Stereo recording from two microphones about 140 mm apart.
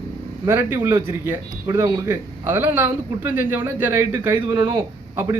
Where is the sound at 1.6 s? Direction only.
25° right (ahead or behind).